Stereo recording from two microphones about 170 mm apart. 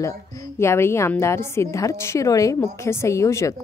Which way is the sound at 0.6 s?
15° left (ahead or behind).